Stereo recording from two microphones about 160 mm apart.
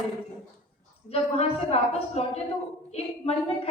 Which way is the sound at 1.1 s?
40° left (ahead or behind).